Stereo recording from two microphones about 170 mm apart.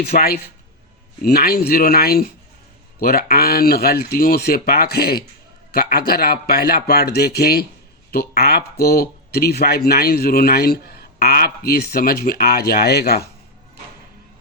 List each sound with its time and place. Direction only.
0.0 s a man's voice: 65° left (ahead or behind)